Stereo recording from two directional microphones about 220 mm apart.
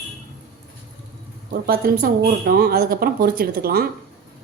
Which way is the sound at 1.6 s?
45° right (ahead or behind).